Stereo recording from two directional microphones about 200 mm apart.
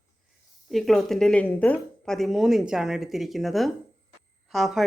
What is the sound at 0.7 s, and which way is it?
A woman's voice, centre (ahead or behind).